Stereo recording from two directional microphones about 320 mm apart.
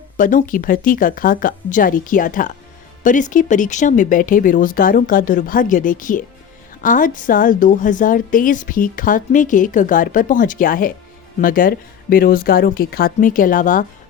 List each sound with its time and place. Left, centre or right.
0.2 s a woman's voice: left